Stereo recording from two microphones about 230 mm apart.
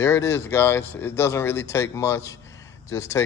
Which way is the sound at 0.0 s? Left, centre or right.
Centre.